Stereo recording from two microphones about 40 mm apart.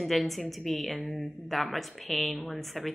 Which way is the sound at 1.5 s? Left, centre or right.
Centre.